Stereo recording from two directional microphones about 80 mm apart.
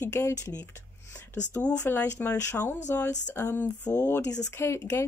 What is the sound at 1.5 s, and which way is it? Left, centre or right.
Speech, centre.